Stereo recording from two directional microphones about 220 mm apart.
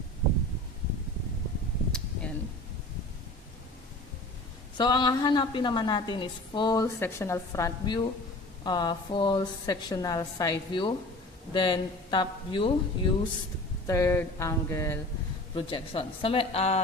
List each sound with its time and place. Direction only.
4.8 s a woman's voice: 20° left (ahead or behind)
13.8 s a sound: 15° left (ahead or behind)
15.5 s a woman's voice: 25° left (ahead or behind)